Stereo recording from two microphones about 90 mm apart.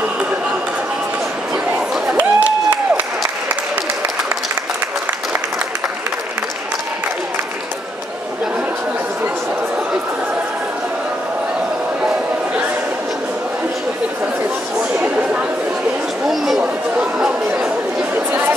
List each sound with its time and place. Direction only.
2.0 s a sound: 15° right (ahead or behind)
16.3 s chatter: 5° right (ahead or behind)
16.9 s chatter: 15° right (ahead or behind)
18.1 s chatter: 25° right (ahead or behind)